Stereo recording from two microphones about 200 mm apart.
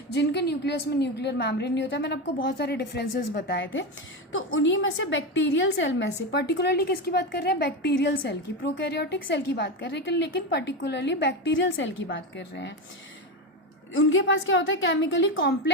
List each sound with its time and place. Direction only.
0.2 s a woman's voice: 55° left (ahead or behind)
13.9 s a woman's voice: 70° left (ahead or behind)